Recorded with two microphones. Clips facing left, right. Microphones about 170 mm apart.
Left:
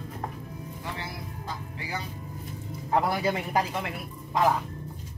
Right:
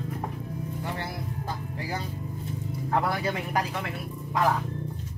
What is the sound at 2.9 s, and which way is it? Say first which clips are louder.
Speech: left 2 dB; 15° left (ahead or behind).